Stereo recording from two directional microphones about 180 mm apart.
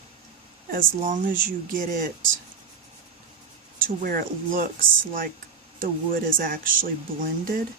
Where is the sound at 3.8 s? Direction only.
50° right (ahead or behind).